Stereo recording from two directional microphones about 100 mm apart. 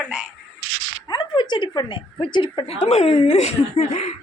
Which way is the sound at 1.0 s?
50° left (ahead or behind).